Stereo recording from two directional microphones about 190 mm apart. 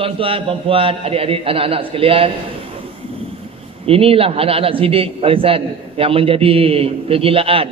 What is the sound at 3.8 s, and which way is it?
A man's voice, 30° right (ahead or behind).